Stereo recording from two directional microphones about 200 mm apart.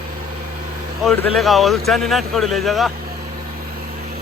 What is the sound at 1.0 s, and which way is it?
Speech, 5° left (ahead or behind).